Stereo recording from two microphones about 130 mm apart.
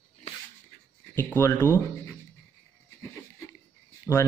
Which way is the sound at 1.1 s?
15° left (ahead or behind).